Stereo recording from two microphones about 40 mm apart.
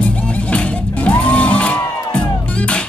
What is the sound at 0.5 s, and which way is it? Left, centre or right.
Music, left.